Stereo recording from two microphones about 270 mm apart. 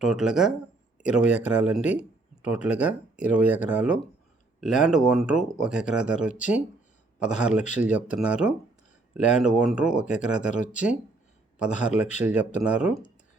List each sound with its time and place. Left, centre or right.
0.0 s speech: centre
1.2 s speech: left
1.5 s speech: centre